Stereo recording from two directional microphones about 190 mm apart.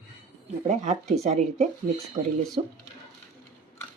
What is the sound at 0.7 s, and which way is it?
Speech, 35° right (ahead or behind).